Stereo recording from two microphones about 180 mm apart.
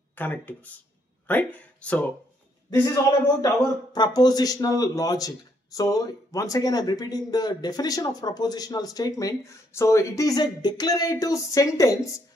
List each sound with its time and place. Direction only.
0.1 s speech: 10° left (ahead or behind)
3.3 s speech: 20° left (ahead or behind)